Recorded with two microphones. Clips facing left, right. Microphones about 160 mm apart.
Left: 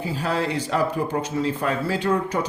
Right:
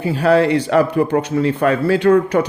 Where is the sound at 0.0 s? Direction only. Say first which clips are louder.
Right 11 dB; 65° right (ahead or behind).